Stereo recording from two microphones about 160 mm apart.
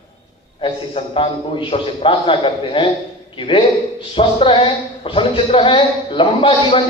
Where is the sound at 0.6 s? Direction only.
35° left (ahead or behind).